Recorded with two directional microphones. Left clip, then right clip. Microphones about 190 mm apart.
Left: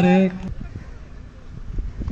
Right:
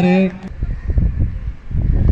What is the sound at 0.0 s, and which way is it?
Speech, 5° right (ahead or behind).